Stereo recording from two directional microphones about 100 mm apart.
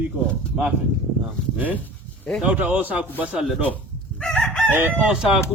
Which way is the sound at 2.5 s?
15° right (ahead or behind).